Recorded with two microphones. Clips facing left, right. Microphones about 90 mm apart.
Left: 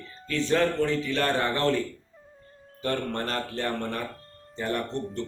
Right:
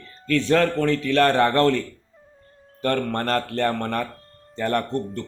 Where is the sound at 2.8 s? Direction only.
60° right (ahead or behind).